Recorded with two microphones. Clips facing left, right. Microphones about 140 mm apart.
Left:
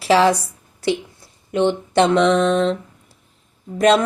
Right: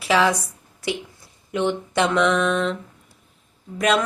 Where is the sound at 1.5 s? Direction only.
30° left (ahead or behind).